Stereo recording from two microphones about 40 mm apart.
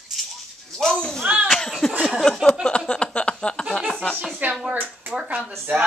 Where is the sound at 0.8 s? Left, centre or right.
Centre.